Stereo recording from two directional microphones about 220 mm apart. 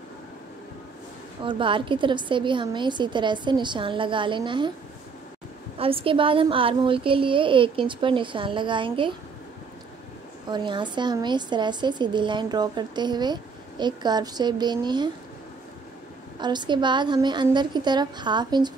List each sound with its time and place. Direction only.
1.4 s speech: 20° right (ahead or behind)
5.8 s speech: 25° right (ahead or behind)
10.5 s speech: 20° right (ahead or behind)
16.3 s speech: 20° right (ahead or behind)